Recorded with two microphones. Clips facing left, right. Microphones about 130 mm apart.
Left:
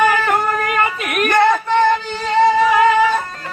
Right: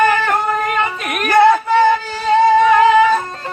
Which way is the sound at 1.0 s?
Centre (ahead or behind).